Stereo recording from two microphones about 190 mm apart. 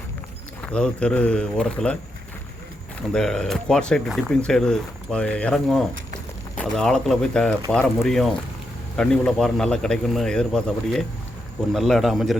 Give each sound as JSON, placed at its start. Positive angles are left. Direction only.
{"t": 0.6, "sound": "speech", "side_deg": 5}
{"t": 3.1, "sound": "speech", "side_deg": 5}